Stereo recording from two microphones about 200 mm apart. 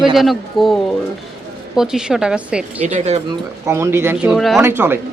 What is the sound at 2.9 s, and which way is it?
Speech, 35° right (ahead or behind).